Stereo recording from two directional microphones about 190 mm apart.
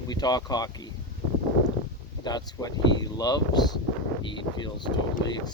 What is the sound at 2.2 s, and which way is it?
Speech, 20° left (ahead or behind).